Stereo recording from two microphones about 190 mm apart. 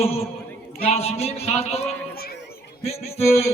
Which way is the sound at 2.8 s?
35° left (ahead or behind).